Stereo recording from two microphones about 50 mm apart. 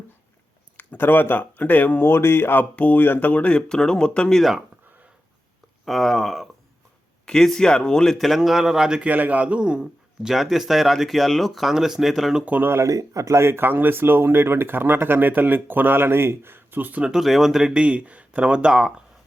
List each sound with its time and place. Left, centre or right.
0.8 s speech: left
2.7 s speech: left
3.5 s speech: centre
5.8 s speech: centre
8.4 s speech: centre
9.0 s speech: right
10.2 s speech: centre
12.8 s speech: right
17.0 s speech: centre
17.7 s speech: right